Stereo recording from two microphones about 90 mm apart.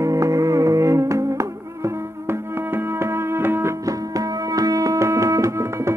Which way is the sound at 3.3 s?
25° right (ahead or behind).